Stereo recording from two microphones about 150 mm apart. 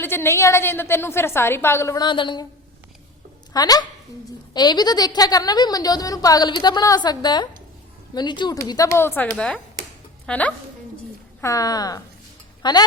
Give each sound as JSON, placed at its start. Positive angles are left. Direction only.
{"t": 0.0, "sound": "a woman's voice", "side_deg": 15}
{"t": 3.5, "sound": "a woman's voice", "side_deg": 25}
{"t": 11.3, "sound": "a woman's voice", "side_deg": 20}